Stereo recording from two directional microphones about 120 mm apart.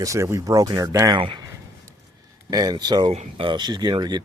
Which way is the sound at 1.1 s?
45° right (ahead or behind).